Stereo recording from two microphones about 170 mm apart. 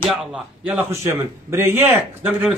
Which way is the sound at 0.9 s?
15° right (ahead or behind).